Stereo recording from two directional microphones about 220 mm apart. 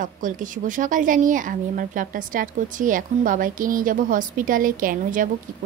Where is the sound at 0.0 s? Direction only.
35° right (ahead or behind).